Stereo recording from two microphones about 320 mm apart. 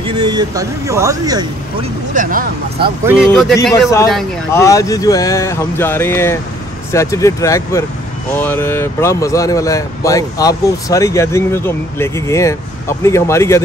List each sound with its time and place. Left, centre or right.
0.0 s speech: centre
2.1 s speech: right
3.3 s a man's voice: centre